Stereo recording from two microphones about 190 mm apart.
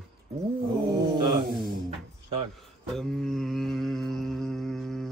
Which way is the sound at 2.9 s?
Centre (ahead or behind).